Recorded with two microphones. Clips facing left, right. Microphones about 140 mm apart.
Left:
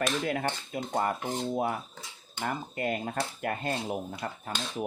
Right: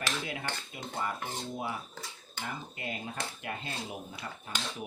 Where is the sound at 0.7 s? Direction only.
50° left (ahead or behind).